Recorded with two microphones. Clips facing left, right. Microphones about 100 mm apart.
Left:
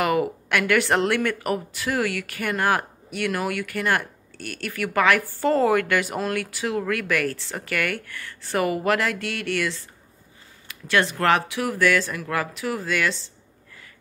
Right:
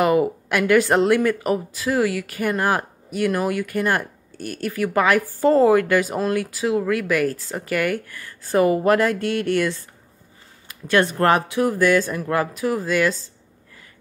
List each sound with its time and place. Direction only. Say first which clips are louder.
0.0 s speech: right 4 dB; 25° right (ahead or behind)
3.8 s speech: even; 20° right (ahead or behind)
4.4 s speech: right 5 dB; 35° right (ahead or behind)
11.1 s speech: right 2 dB; 35° right (ahead or behind)
11.6 s speech: right 4 dB; 25° right (ahead or behind)